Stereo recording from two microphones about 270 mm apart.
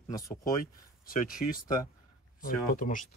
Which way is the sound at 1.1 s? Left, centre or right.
Left.